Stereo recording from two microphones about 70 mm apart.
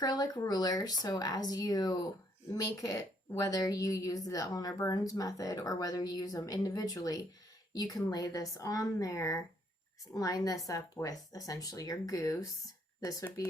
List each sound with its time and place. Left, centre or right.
0.0 s a woman's voice: left